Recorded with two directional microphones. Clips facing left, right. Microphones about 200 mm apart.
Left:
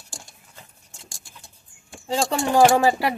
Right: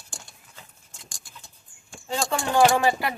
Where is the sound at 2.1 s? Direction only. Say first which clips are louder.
Left 4 dB; 25° left (ahead or behind).